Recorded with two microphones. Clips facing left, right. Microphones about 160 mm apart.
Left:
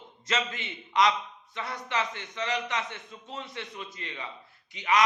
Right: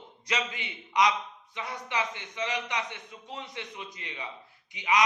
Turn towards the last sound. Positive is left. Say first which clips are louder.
# left 1 dB
turn(degrees=-15)  # may be behind; listen again after turning